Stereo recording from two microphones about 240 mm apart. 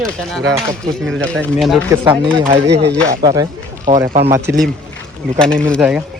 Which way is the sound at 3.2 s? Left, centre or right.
Centre.